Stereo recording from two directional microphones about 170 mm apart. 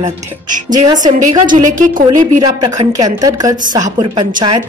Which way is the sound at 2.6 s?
25° right (ahead or behind).